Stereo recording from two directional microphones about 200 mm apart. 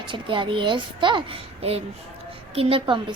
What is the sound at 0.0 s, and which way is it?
A woman's voice, 25° right (ahead or behind).